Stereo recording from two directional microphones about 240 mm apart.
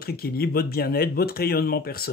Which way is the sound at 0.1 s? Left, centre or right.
Left.